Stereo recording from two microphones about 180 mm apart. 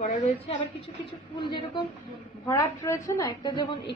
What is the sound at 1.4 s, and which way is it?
A woman's voice, 25° left (ahead or behind).